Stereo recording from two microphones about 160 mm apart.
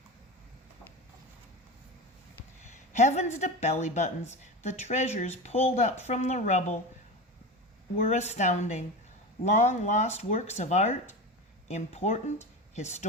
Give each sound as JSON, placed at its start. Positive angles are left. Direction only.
{"t": 2.9, "sound": "a woman's voice", "side_deg": 45}
{"t": 7.9, "sound": "a woman's voice", "side_deg": 40}